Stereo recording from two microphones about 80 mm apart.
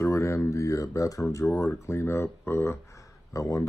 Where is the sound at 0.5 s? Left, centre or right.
Left.